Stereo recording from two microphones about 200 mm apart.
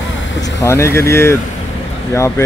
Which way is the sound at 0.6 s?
15° left (ahead or behind).